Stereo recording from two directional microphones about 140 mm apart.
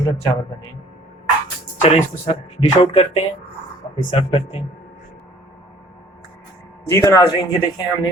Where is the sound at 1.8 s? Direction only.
50° left (ahead or behind).